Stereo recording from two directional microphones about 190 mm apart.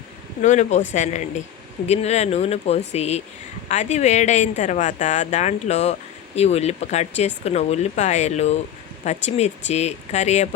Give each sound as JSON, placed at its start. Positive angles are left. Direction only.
{"t": 0.4, "sound": "speech", "side_deg": 40}